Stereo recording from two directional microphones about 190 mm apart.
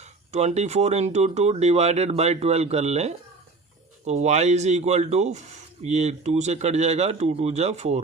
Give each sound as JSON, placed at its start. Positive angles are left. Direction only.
{"t": 0.3, "sound": "speech", "side_deg": -35}